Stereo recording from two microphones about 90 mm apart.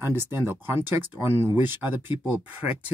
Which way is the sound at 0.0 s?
25° right (ahead or behind).